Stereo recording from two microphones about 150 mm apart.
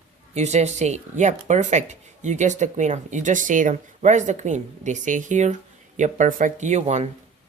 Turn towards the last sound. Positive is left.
turn(degrees=-50)  # may be behind; listen again after turning